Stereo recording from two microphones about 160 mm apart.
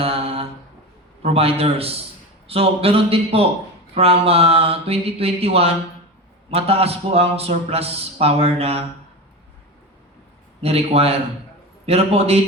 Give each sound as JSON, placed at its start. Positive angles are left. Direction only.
{"t": 0.0, "sound": "mantra", "side_deg": -40}
{"t": 1.2, "sound": "a man's voice", "side_deg": -40}
{"t": 10.6, "sound": "a man's voice", "side_deg": -40}